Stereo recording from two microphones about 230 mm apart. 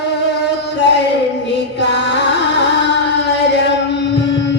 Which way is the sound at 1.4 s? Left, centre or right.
Left.